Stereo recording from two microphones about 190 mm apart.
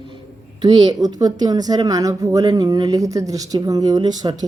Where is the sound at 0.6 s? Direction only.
20° right (ahead or behind).